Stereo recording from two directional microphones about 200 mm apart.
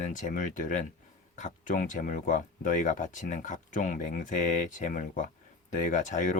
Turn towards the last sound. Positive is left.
turn(degrees=40)  # may be behind; listen again after turning